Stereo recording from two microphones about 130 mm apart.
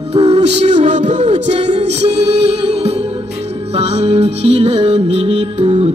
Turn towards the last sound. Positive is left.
turn(degrees=-50)  # may be behind; listen again after turning